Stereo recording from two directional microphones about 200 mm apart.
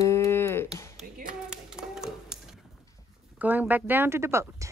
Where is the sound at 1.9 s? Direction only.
Centre (ahead or behind).